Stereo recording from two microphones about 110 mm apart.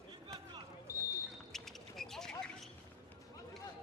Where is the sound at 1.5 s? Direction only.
5° left (ahead or behind).